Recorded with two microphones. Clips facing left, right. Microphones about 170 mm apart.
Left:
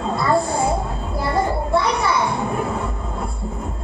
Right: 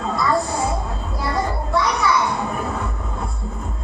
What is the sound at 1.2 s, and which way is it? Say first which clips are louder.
Child singing: left 3 dB; 25° left (ahead or behind).